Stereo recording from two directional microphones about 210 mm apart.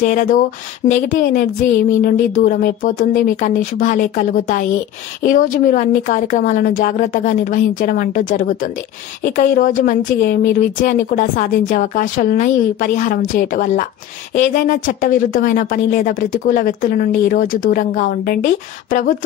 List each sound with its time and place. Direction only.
0.0 s a woman's voice: 40° left (ahead or behind)